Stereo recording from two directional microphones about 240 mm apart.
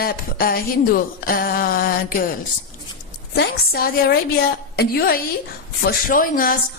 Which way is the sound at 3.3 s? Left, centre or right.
Left.